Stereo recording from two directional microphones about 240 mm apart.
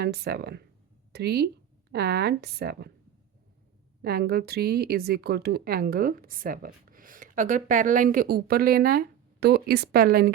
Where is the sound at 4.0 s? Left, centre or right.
Right.